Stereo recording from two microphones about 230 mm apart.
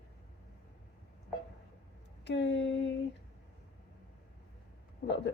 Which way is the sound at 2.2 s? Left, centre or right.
Left.